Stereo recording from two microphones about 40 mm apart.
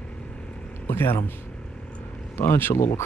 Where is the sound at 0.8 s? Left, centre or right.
Left.